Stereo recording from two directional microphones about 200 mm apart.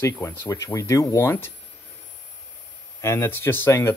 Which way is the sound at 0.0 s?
10° left (ahead or behind).